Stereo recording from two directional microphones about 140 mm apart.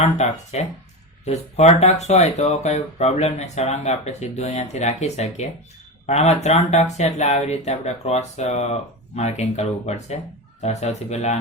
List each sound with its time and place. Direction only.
0.0 s speech: 50° left (ahead or behind)